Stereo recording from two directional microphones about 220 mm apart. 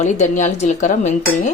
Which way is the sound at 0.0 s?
35° left (ahead or behind).